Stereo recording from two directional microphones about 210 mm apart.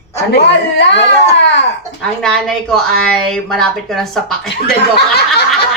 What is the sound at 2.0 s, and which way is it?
Speech, 5° left (ahead or behind).